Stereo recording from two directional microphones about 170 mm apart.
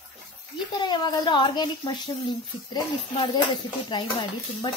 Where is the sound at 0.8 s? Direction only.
25° left (ahead or behind).